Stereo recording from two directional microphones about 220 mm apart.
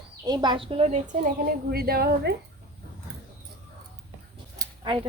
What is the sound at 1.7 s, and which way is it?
Speech, 45° right (ahead or behind).